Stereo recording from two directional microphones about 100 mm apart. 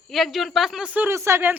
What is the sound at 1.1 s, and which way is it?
Speech, 30° right (ahead or behind).